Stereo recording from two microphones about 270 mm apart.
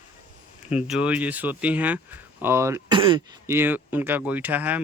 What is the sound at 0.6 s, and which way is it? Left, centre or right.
Speech, centre.